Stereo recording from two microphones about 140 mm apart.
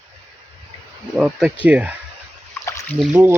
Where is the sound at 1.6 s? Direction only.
10° right (ahead or behind).